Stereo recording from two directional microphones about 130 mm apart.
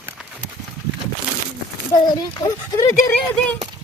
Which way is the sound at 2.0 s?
30° left (ahead or behind).